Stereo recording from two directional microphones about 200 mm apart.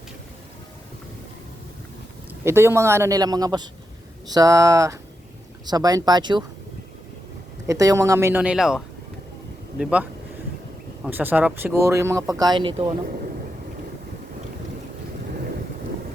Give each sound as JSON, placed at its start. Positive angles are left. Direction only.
{"t": 2.4, "sound": "speech", "side_deg": -10}
{"t": 7.7, "sound": "speech", "side_deg": -15}